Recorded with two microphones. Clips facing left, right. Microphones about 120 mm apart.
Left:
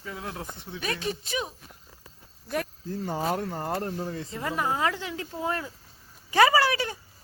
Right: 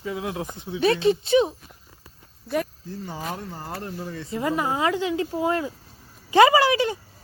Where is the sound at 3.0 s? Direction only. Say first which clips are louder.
Left 5 dB; 40° left (ahead or behind).